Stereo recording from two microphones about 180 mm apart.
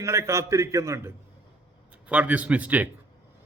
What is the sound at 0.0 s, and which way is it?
A man's voice, 15° right (ahead or behind).